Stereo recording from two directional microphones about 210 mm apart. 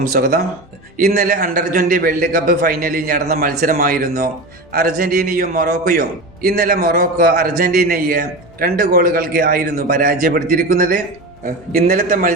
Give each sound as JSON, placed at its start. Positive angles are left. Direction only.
{"t": 0.1, "sound": "a man's voice", "side_deg": -45}